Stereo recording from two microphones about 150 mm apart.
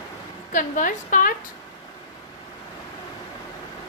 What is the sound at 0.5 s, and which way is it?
Speech, 60° left (ahead or behind).